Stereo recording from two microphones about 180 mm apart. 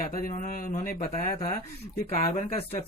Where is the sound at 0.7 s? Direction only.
45° left (ahead or behind).